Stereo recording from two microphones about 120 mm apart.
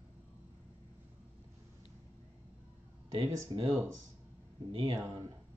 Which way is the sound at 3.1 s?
30° right (ahead or behind).